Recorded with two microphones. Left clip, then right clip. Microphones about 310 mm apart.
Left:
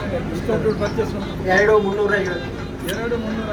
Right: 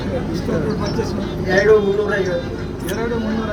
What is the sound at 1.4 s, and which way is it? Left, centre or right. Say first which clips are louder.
Speech: right 2 dB; centre.